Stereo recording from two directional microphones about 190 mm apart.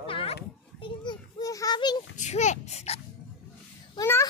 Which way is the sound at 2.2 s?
40° left (ahead or behind).